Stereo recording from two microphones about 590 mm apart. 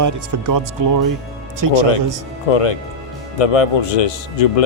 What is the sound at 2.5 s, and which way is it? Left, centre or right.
Speech, left.